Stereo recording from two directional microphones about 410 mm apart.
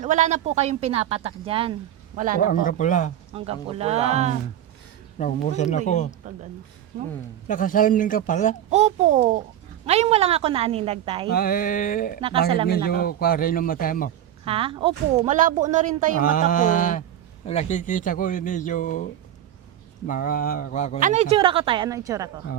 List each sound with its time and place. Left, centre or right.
0.0 s a woman's voice: centre
2.5 s speech: centre
3.3 s a woman's voice: centre
5.1 s speech: centre
7.4 s speech: centre
8.7 s a woman's voice: centre
11.3 s speech: left
14.4 s a woman's voice: centre
16.2 s speech: centre
20.1 s speech: left
21.0 s a woman's voice: centre